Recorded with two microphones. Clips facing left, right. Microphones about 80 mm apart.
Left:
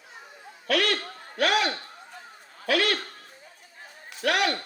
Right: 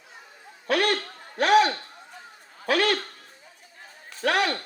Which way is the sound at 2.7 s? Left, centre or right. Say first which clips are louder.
Right 2 dB; right.